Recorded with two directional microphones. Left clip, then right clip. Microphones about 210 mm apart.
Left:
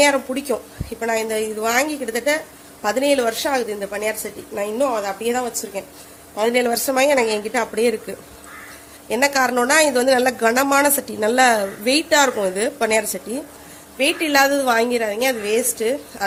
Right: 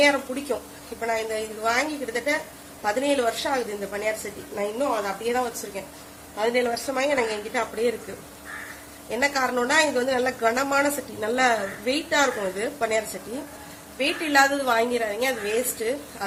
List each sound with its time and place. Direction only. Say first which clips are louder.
0.3 s a woman's voice: left 5 dB; 55° left (ahead or behind)
9.0 s speech: left 6 dB; 45° left (ahead or behind)
14.0 s speech: left 4 dB; 45° left (ahead or behind)